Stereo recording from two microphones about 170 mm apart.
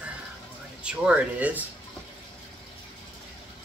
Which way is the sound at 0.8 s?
5° right (ahead or behind).